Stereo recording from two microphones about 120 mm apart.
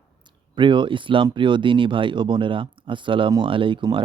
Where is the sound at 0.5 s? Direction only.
40° right (ahead or behind).